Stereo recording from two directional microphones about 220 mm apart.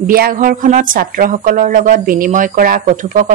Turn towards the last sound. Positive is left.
turn(degrees=-35)  # may be behind; listen again after turning